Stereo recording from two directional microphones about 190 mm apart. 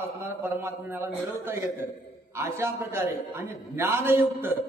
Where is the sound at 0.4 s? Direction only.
10° right (ahead or behind).